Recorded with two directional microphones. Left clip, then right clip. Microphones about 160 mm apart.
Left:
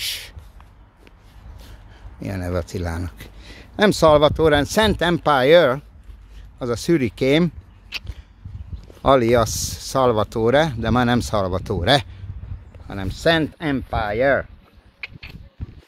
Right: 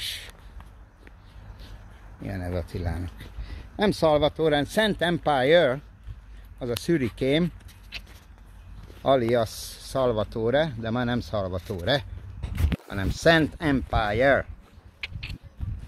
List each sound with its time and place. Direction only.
0.0 s a sound: 50° left (ahead or behind)
2.2 s speech: 50° left (ahead or behind)
9.0 s speech: 55° left (ahead or behind); by 12.1 s 75° left (ahead or behind)
12.8 s speech: 15° left (ahead or behind)
13.1 s speech: centre (ahead or behind)
13.8 s speech: 25° left (ahead or behind)